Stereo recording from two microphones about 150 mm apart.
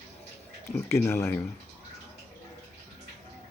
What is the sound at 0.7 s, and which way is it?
Speech, 15° left (ahead or behind).